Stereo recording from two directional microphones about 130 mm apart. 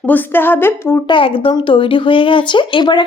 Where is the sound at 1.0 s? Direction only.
40° left (ahead or behind).